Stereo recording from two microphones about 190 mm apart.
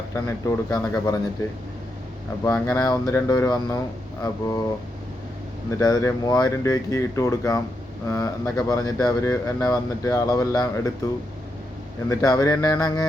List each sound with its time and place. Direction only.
0.1 s speech: 15° left (ahead or behind)
2.6 s speech: 20° left (ahead or behind)
5.8 s speech: 15° left (ahead or behind)
12.0 s speech: 20° left (ahead or behind)